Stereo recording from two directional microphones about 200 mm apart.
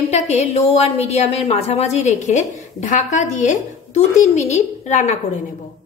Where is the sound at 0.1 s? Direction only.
35° left (ahead or behind).